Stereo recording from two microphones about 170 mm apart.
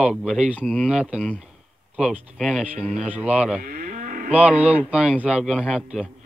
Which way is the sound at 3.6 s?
55° right (ahead or behind).